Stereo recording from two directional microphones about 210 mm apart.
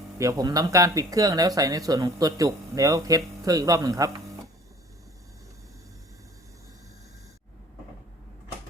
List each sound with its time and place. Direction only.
0.2 s speech: 15° right (ahead or behind)